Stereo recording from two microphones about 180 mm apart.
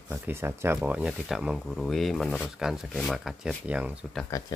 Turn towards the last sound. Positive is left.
turn(degrees=0)  # may be behind; listen again after turning